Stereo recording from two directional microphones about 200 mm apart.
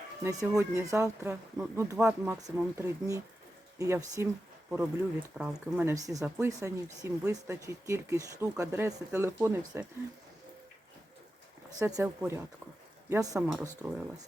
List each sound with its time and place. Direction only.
0.2 s speech: 15° right (ahead or behind)
11.8 s speech: 15° right (ahead or behind)
13.4 s speech: 5° right (ahead or behind)